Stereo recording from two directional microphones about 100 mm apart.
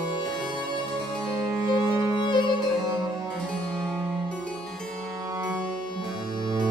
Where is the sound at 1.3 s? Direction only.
30° right (ahead or behind).